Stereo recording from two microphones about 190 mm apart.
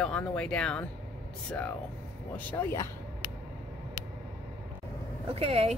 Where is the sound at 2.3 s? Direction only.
10° left (ahead or behind).